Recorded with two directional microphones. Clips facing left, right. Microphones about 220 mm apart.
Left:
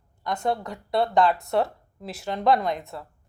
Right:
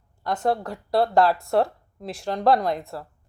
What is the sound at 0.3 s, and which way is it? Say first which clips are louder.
Speech: right 3 dB; centre (ahead or behind).